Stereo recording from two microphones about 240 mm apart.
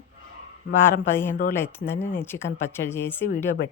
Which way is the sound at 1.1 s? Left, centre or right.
Centre.